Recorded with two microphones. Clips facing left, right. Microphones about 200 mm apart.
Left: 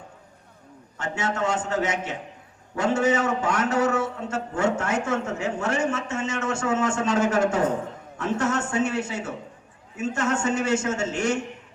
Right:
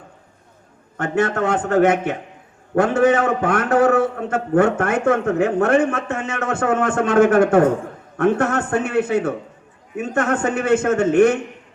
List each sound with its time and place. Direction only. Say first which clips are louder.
0.9 s a man's voice: right 8 dB; 55° right (ahead or behind)